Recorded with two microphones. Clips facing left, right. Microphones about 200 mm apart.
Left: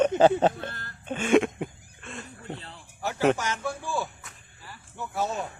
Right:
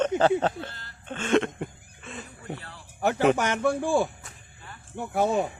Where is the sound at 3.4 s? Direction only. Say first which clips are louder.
Right 7 dB; 60° right (ahead or behind).